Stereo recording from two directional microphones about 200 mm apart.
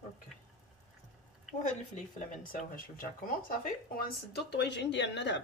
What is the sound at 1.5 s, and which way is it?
Speech, 35° left (ahead or behind).